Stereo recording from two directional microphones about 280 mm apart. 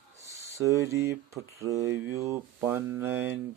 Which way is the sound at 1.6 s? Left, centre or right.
Centre.